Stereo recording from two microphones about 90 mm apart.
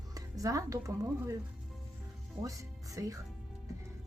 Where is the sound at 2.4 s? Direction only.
40° right (ahead or behind).